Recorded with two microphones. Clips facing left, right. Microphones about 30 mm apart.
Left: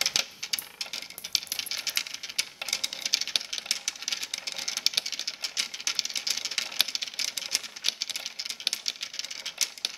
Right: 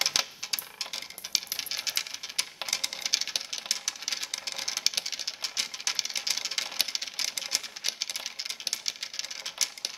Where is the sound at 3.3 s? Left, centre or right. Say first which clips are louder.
Left 4 dB; left.